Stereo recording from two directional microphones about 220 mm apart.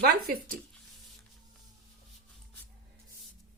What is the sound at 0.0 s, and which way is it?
Speech, 40° right (ahead or behind).